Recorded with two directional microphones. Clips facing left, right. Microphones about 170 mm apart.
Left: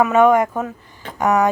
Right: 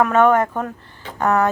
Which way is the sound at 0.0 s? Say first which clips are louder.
Left 1 dB; 10° left (ahead or behind).